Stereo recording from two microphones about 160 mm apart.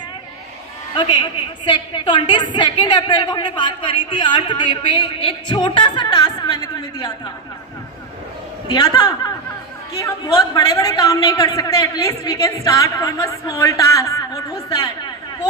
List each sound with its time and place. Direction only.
0.9 s a woman's voice: 30° left (ahead or behind)
8.6 s a woman's voice: 25° left (ahead or behind)